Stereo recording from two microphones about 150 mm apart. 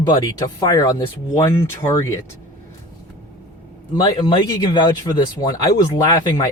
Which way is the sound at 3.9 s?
30° left (ahead or behind).